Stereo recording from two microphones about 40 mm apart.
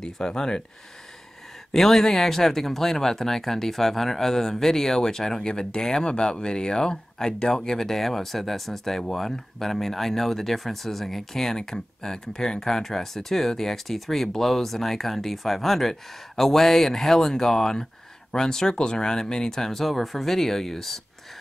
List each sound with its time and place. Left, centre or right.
0.3 s speech: left
1.7 s speech: centre